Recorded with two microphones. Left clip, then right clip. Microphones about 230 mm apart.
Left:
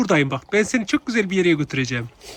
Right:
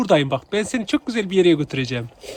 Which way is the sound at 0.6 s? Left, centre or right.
Left.